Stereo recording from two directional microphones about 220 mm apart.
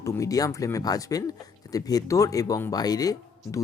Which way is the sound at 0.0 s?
15° left (ahead or behind).